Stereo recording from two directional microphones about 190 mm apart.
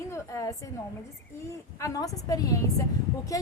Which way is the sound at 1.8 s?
20° left (ahead or behind).